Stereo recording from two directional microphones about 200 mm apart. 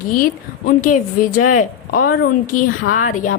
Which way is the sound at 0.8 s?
40° left (ahead or behind).